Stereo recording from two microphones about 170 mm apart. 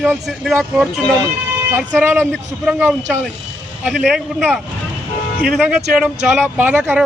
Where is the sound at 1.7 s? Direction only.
10° right (ahead or behind).